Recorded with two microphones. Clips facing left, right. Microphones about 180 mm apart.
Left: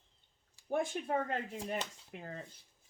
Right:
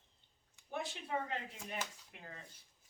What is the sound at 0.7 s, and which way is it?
Speech, 50° left (ahead or behind).